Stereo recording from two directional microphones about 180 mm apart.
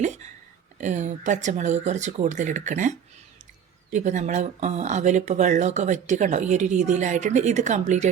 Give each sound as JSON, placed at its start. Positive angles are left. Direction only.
{"t": 0.0, "sound": "a sound", "side_deg": -40}
{"t": 0.8, "sound": "speech", "side_deg": -40}
{"t": 3.9, "sound": "speech", "side_deg": -40}